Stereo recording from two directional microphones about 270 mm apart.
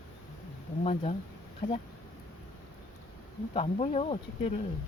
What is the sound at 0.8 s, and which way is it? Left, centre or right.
Speech, left.